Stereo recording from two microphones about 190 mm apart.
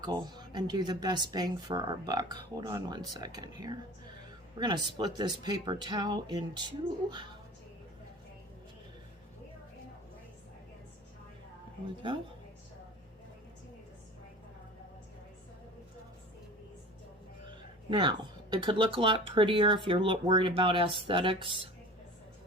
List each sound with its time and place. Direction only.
0.0 s speech: 20° right (ahead or behind)
17.9 s speech: 25° right (ahead or behind)